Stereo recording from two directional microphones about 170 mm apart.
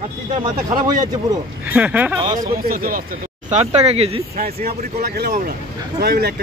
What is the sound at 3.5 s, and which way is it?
Speech, 40° right (ahead or behind).